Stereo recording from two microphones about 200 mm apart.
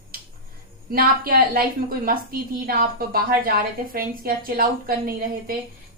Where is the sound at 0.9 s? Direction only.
45° right (ahead or behind).